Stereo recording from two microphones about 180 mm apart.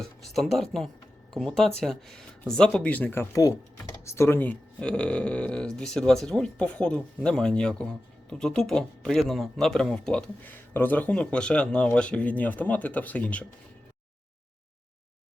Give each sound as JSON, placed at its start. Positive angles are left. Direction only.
{"t": 0.0, "sound": "speech", "side_deg": 0}